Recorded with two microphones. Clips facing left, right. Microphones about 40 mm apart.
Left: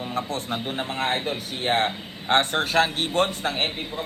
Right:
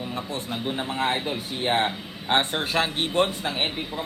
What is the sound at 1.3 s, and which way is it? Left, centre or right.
A man's voice, centre.